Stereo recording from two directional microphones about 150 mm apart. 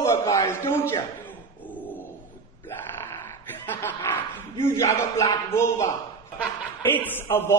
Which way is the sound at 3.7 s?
15° left (ahead or behind).